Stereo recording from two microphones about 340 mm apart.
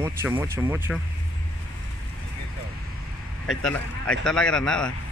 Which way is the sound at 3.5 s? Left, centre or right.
Centre.